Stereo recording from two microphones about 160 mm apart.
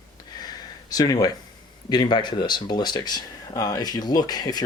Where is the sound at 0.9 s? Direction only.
25° left (ahead or behind).